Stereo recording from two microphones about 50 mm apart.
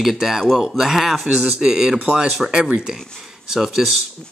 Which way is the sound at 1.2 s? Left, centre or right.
Centre.